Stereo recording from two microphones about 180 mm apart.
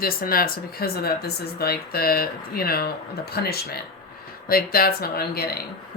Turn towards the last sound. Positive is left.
turn(degrees=60)  # may be behind; listen again after turning